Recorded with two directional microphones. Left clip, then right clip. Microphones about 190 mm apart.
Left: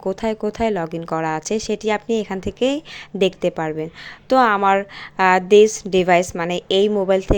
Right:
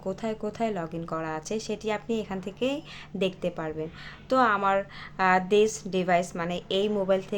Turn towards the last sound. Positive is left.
turn(degrees=35)  # may be behind; listen again after turning